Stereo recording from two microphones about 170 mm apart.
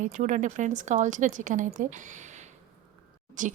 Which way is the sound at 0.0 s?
45° right (ahead or behind).